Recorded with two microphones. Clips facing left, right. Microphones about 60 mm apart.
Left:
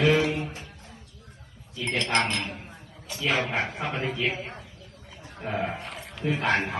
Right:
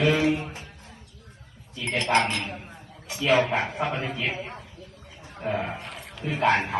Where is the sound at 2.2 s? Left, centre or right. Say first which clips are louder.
Right 3 dB; centre.